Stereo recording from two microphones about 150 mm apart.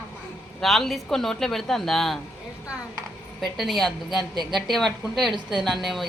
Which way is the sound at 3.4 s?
Centre (ahead or behind).